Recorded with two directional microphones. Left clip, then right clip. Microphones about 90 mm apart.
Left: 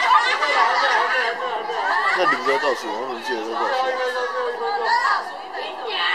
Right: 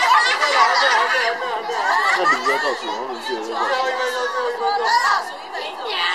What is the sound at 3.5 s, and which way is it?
Chatter, 30° right (ahead or behind).